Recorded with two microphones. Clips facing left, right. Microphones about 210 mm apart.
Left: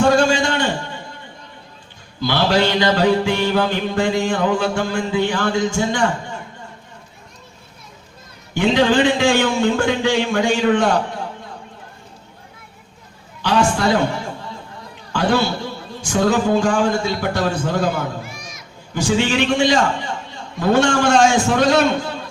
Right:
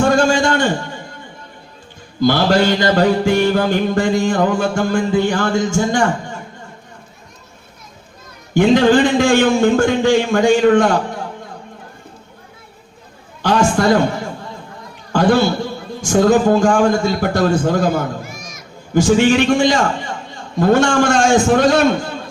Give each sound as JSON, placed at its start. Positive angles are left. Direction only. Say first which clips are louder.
{"t": 0.2, "sound": "a sound", "louder": "right 3 dB", "side_deg": -50}
{"t": 2.2, "sound": "a man's voice", "louder": "right 4 dB", "side_deg": -45}
{"t": 8.5, "sound": "a man's voice", "louder": "right 4 dB", "side_deg": -45}
{"t": 13.4, "sound": "a man's voice", "louder": "right 3 dB", "side_deg": -50}
{"t": 15.1, "sound": "a man's voice", "louder": "right 5 dB", "side_deg": -50}